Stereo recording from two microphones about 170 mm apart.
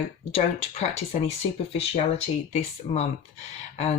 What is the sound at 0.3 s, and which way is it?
Speech, 40° left (ahead or behind).